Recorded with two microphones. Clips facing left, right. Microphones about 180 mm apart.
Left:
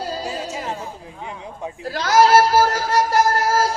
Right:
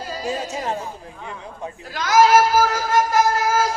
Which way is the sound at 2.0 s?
30° left (ahead or behind).